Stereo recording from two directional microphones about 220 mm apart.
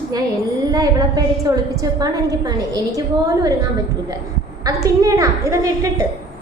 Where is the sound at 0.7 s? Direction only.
15° right (ahead or behind).